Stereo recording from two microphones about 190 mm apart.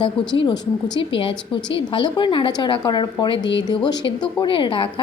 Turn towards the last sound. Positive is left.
turn(degrees=25)  # may be behind; listen again after turning